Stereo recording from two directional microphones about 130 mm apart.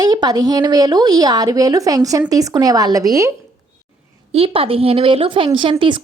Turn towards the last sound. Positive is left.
turn(degrees=-40)  # may be behind; listen again after turning